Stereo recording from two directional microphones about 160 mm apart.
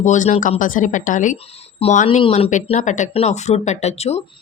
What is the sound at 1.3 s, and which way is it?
Speech, 40° left (ahead or behind).